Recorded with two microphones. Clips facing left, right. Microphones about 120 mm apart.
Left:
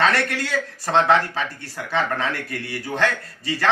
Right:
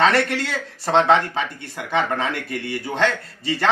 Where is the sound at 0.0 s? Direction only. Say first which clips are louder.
Right 3 dB; 25° right (ahead or behind).